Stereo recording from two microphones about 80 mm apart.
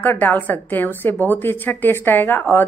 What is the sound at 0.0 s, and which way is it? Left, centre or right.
A woman's voice, left.